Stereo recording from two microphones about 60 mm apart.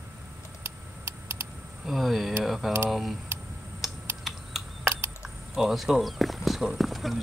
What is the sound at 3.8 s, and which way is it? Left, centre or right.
Typing, centre.